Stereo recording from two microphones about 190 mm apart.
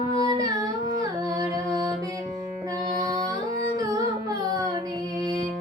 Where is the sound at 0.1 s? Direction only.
20° right (ahead or behind).